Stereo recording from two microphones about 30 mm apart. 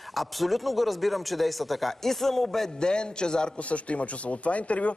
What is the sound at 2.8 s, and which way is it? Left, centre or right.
Speech, left.